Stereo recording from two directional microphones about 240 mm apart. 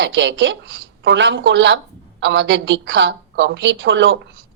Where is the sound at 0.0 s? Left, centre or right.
Right.